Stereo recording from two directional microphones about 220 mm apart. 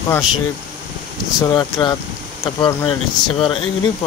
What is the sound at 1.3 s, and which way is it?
Speech, 20° left (ahead or behind).